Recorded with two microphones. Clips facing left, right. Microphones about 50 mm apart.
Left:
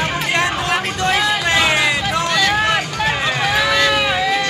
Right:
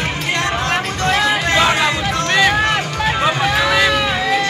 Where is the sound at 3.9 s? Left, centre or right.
Centre.